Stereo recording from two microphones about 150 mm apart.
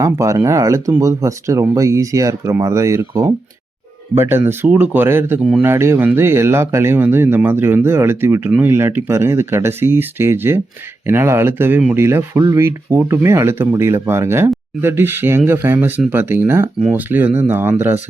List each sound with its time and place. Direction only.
0.0 s speech: 20° right (ahead or behind)
5.4 s speech: 5° right (ahead or behind)
5.6 s speech: 15° right (ahead or behind)